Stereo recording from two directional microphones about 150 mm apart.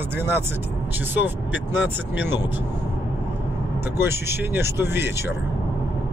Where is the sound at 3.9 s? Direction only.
15° right (ahead or behind).